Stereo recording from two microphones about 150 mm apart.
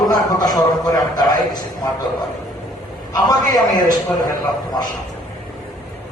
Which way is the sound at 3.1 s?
25° left (ahead or behind).